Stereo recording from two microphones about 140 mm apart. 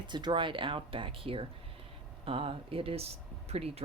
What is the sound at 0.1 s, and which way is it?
Speech, 30° right (ahead or behind).